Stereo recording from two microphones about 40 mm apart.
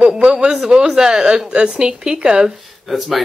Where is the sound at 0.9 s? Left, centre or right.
Centre.